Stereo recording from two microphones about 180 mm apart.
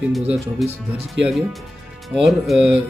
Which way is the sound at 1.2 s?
90° right.